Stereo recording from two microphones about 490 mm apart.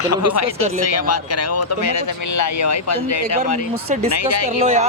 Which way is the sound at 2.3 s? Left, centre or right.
Left.